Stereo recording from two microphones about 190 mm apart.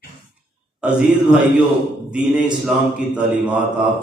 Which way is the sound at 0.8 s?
5° right (ahead or behind).